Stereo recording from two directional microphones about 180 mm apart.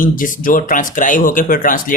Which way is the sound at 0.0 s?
50° left (ahead or behind).